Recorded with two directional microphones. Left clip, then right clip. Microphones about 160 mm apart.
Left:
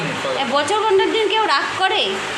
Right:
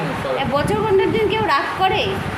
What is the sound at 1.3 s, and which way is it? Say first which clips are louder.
Speech: left 1 dB; centre (ahead or behind).